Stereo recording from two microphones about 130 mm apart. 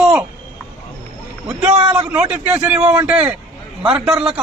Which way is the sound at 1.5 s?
50° right (ahead or behind).